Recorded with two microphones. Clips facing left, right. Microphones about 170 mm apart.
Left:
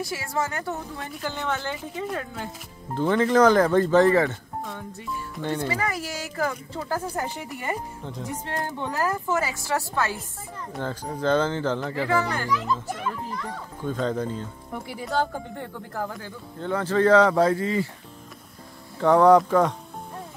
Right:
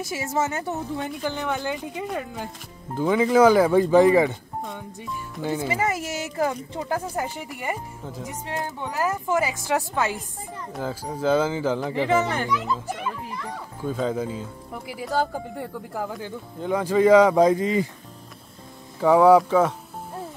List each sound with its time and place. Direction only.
0.0 s a child's voice: 20° right (ahead or behind)
5.3 s speech: 5° right (ahead or behind)
5.7 s a child's voice: 20° right (ahead or behind)
12.5 s a child's voice: 10° right (ahead or behind)
18.9 s speech: 5° right (ahead or behind)